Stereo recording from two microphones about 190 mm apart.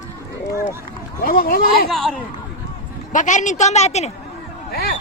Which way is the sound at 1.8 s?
Centre (ahead or behind).